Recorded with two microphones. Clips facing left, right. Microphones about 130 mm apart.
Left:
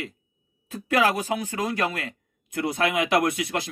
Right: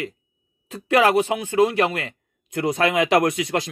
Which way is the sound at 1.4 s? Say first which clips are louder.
Right 8 dB; 20° right (ahead or behind).